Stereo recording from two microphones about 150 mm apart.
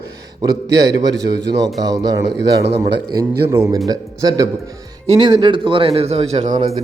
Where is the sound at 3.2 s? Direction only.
20° right (ahead or behind).